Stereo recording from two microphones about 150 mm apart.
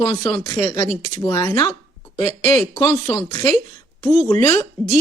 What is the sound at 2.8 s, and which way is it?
Speech, 20° left (ahead or behind).